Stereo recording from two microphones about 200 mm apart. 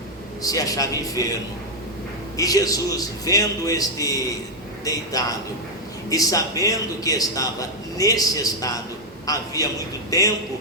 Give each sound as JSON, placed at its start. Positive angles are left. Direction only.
{"t": 0.4, "sound": "a man's voice", "side_deg": 15}
{"t": 2.3, "sound": "a man's voice", "side_deg": 15}
{"t": 6.1, "sound": "a man's voice", "side_deg": 15}